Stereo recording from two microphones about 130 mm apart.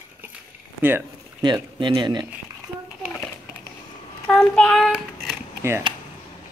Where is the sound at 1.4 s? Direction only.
35° right (ahead or behind).